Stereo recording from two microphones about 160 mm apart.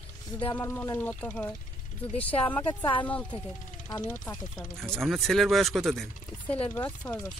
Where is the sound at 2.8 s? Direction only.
30° left (ahead or behind).